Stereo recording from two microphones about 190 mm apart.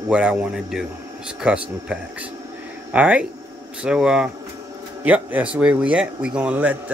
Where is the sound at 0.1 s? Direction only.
5° right (ahead or behind).